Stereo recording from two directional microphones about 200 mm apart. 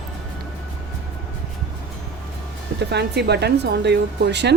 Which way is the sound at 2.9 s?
55° right (ahead or behind).